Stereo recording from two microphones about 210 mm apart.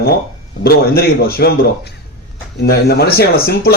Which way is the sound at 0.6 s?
50° left (ahead or behind).